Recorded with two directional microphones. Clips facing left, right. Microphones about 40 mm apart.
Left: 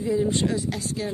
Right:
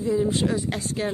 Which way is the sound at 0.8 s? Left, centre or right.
Right.